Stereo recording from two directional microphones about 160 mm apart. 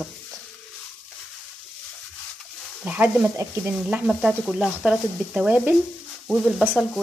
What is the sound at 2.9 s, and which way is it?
Speech, 10° right (ahead or behind).